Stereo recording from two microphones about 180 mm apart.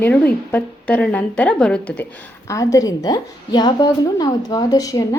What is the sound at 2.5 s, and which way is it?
A woman's voice, 20° left (ahead or behind).